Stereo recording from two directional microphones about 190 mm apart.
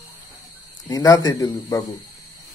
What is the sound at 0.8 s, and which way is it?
Speech, 20° left (ahead or behind).